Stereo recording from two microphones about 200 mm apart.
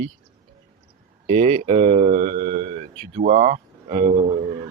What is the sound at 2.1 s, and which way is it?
Speech, 45° right (ahead or behind).